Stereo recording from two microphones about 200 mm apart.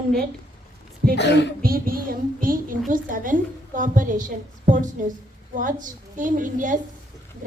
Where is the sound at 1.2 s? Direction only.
60° left (ahead or behind).